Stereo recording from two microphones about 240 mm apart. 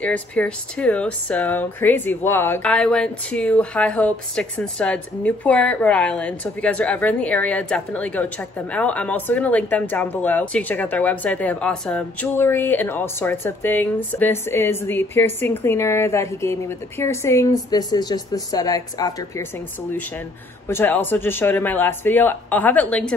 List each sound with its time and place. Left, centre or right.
0.0 s speech: centre
20.6 s speech: centre